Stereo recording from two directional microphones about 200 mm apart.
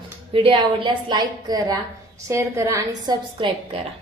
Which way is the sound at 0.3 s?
25° right (ahead or behind).